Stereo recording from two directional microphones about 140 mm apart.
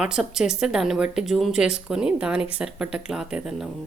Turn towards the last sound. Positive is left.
turn(degrees=0)  # may be behind; listen again after turning